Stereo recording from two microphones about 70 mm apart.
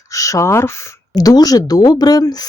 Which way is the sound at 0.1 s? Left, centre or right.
Left.